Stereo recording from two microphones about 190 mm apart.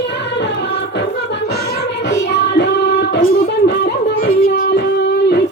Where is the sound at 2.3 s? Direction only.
65° left (ahead or behind).